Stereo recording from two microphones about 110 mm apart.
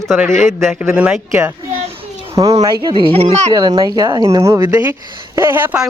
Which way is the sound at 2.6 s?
35° right (ahead or behind).